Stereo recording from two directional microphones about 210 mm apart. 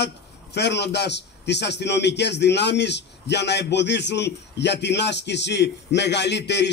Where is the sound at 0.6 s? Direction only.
55° left (ahead or behind).